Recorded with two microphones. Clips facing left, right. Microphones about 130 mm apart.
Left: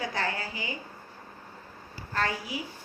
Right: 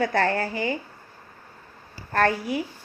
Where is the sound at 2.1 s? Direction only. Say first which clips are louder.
Right 8 dB; 55° right (ahead or behind).